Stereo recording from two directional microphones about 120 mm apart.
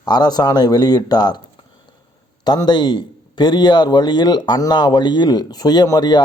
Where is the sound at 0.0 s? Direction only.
35° left (ahead or behind).